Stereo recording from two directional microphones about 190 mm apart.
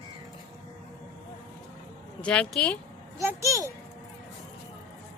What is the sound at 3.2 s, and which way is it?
Speech, 15° right (ahead or behind).